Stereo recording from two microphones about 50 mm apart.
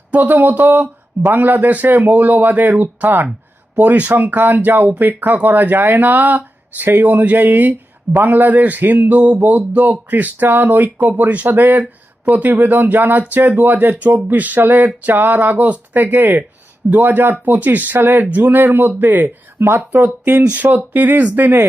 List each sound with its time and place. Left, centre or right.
0.1 s speech: right
19.5 s speech: right
20.5 s speech: right